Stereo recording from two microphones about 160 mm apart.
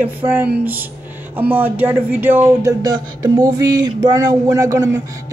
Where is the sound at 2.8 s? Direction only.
25° right (ahead or behind).